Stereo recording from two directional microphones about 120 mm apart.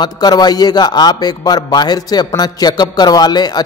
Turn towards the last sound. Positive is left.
turn(degrees=35)  # may be behind; listen again after turning